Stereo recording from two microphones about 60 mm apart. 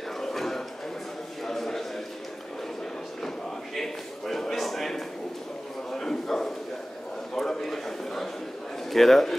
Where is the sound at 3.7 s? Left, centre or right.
Centre.